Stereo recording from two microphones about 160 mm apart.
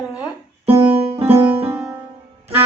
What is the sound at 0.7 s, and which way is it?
Music, 35° right (ahead or behind).